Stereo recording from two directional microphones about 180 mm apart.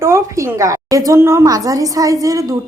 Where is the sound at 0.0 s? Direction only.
15° right (ahead or behind).